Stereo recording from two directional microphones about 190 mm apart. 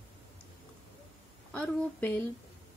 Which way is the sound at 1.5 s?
10° left (ahead or behind).